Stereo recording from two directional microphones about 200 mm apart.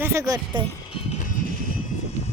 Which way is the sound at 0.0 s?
15° right (ahead or behind).